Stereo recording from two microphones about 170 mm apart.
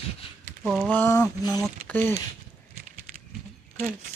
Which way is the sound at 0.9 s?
15° left (ahead or behind).